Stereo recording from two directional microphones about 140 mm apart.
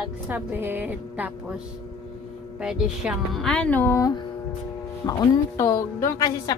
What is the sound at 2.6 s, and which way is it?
Speech, 5° right (ahead or behind).